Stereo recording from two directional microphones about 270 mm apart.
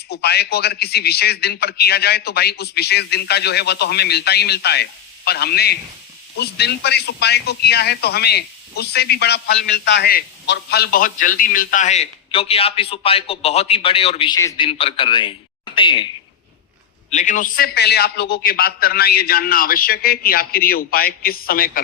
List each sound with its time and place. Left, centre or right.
0.1 s a man's voice: left; by 16.0 s centre
17.1 s a man's voice: left